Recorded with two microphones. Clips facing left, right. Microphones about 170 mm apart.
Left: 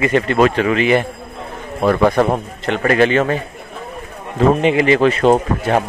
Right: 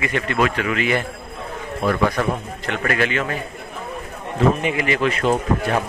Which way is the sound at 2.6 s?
30° left (ahead or behind).